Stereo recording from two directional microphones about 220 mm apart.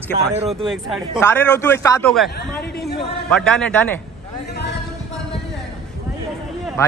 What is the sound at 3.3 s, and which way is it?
Speech, 5° left (ahead or behind).